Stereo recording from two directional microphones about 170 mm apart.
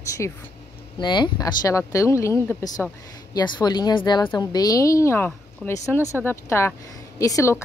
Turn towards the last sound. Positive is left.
turn(degrees=20)  # may be behind; listen again after turning